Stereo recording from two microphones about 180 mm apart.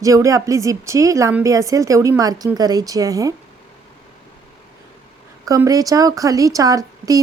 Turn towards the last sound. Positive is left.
turn(degrees=-20)  # may be behind; listen again after turning